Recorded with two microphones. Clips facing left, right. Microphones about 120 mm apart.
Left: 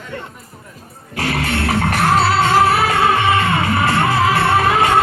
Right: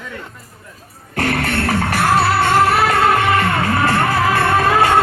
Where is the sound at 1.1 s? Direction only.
50° right (ahead or behind).